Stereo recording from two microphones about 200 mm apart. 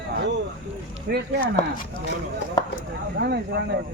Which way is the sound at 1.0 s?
55° right (ahead or behind).